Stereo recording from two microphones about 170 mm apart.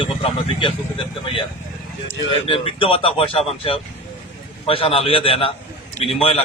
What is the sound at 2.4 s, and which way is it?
Speech, 35° left (ahead or behind).